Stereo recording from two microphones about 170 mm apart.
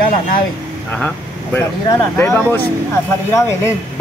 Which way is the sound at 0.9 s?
10° left (ahead or behind).